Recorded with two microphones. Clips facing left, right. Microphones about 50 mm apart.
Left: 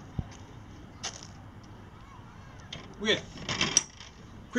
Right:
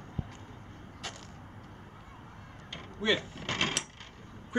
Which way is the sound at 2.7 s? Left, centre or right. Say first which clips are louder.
Even; centre.